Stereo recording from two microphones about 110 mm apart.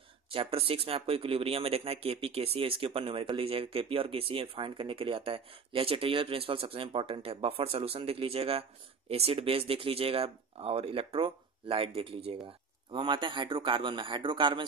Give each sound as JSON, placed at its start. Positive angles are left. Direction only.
{"t": 0.3, "sound": "speech", "side_deg": -60}